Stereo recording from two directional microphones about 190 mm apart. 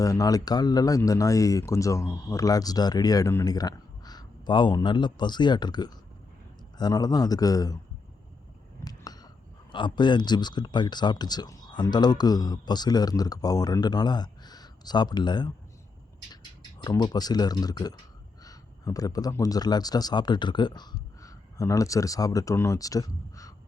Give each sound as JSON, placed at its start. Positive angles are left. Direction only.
{"t": 0.0, "sound": "speech", "side_deg": 20}
{"t": 8.8, "sound": "a sound", "side_deg": 20}
{"t": 9.7, "sound": "speech", "side_deg": 25}
{"t": 16.8, "sound": "speech", "side_deg": 20}